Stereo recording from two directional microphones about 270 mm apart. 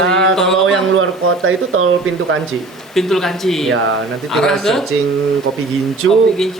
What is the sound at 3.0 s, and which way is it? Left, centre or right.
A man's voice, centre.